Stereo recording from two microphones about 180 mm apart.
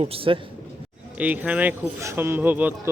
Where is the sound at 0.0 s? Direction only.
30° right (ahead or behind).